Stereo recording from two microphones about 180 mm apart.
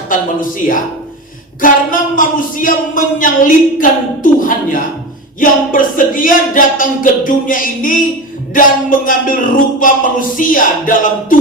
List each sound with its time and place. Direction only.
0.1 s speech: 50° left (ahead or behind)